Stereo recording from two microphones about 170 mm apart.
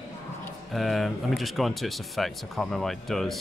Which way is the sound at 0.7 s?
Centre (ahead or behind).